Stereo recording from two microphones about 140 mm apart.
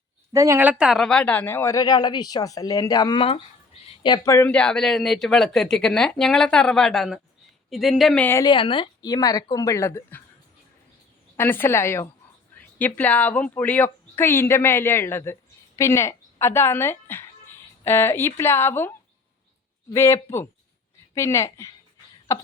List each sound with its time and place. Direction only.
0.3 s a woman's voice: 20° right (ahead or behind)
0.6 s speech: 10° right (ahead or behind); by 3.2 s 30° left (ahead or behind)
4.3 s speech: 20° left (ahead or behind)
4.5 s speech: 5° left (ahead or behind)
8.2 s a woman's voice: 15° left (ahead or behind)
8.4 s speech: 35° left (ahead or behind); by 10.2 s 15° left (ahead or behind)
11.3 s a woman's voice: 15° left (ahead or behind)